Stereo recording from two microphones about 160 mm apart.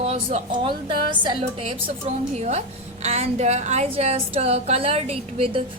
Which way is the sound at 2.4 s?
45° right (ahead or behind).